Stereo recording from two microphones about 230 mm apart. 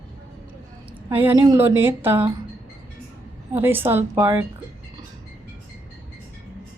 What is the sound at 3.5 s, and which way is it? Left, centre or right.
Speech, centre.